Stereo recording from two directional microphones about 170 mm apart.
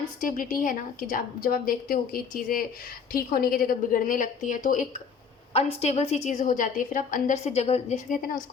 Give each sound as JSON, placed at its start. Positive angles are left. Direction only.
{"t": 0.2, "sound": "a woman's voice", "side_deg": 50}
{"t": 5.5, "sound": "a woman's voice", "side_deg": 35}